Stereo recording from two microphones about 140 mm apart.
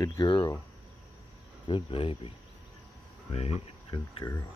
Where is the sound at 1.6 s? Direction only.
40° left (ahead or behind).